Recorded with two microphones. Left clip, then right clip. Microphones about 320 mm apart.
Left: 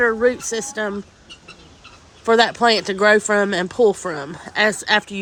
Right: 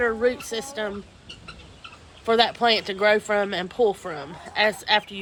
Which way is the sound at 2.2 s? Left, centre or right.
Left.